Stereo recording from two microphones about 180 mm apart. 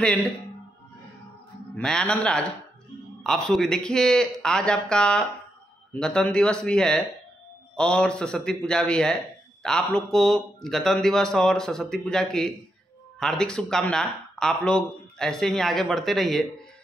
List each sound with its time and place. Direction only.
1.8 s speech: 5° left (ahead or behind)